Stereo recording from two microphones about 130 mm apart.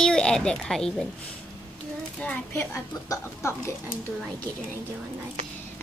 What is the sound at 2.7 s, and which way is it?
Speech, 20° left (ahead or behind).